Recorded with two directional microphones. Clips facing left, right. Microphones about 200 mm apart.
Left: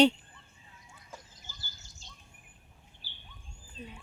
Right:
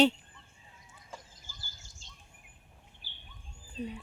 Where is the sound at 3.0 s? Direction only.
20° right (ahead or behind).